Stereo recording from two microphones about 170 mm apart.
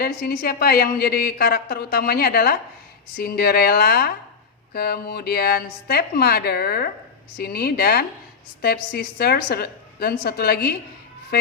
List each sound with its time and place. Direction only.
0.0 s a woman's voice: 65° left (ahead or behind)